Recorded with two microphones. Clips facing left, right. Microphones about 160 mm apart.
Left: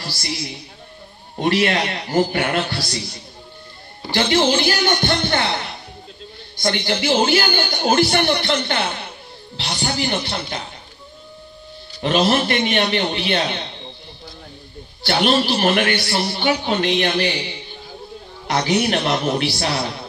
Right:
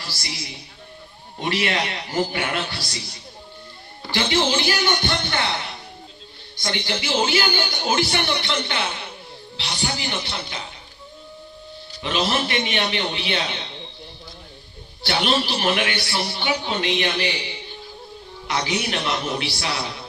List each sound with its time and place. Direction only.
1.4 s speech: 45° left (ahead or behind)
4.1 s speech: 45° left (ahead or behind)
12.0 s speech: 50° left (ahead or behind)
15.0 s speech: 50° left (ahead or behind)
18.5 s speech: 50° left (ahead or behind)